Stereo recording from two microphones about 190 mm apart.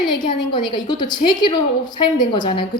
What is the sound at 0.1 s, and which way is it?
A woman's voice, 25° left (ahead or behind).